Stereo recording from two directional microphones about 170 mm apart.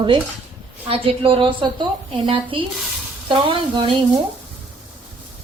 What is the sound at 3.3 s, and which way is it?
Sizzle, 30° right (ahead or behind).